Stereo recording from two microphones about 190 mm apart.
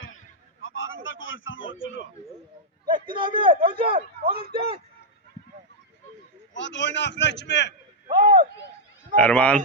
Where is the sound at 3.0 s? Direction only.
25° right (ahead or behind).